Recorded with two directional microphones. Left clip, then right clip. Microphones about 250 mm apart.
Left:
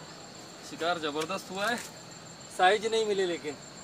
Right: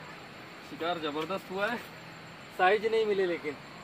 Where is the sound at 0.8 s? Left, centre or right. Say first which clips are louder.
Left 2 dB; left.